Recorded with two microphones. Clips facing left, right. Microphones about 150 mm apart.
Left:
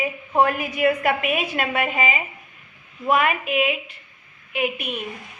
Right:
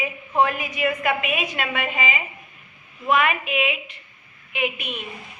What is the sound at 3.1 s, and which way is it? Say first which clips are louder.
A woman's voice: left 1 dB; 35° left (ahead or behind).